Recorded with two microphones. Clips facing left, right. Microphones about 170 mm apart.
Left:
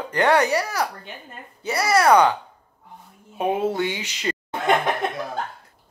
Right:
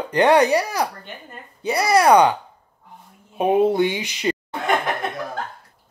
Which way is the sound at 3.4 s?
15° right (ahead or behind).